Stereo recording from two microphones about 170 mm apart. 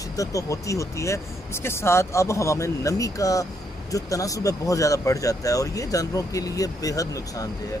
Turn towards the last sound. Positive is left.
turn(degrees=20)  # may be behind; listen again after turning